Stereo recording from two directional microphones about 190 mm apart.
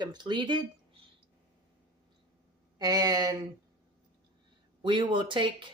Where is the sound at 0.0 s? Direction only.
25° right (ahead or behind).